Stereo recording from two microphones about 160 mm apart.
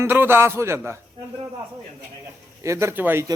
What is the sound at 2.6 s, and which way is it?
Speech, 15° right (ahead or behind).